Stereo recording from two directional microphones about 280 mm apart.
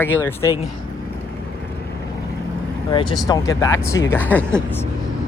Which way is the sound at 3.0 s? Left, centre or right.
Centre.